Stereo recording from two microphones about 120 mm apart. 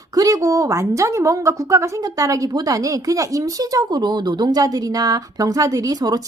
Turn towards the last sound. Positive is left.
turn(degrees=-30)  # may be behind; listen again after turning